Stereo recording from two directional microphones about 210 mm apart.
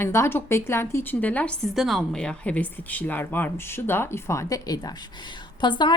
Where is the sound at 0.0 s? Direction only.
10° left (ahead or behind).